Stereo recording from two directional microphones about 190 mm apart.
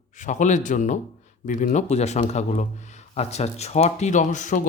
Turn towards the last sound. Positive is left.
turn(degrees=40)  # may be behind; listen again after turning